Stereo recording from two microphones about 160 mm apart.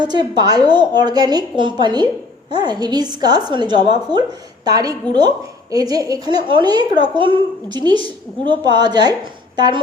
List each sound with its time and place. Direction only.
0.0 s a woman's voice: 25° right (ahead or behind)